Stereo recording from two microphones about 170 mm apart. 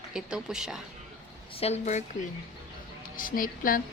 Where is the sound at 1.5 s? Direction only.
40° left (ahead or behind).